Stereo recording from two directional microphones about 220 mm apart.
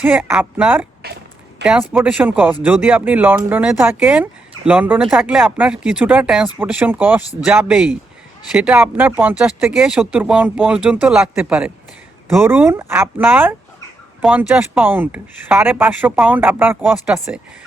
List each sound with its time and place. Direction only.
0.0 s speech: 5° right (ahead or behind)
1.0 s a sound: 45° right (ahead or behind)
1.6 s speech: 5° right (ahead or behind)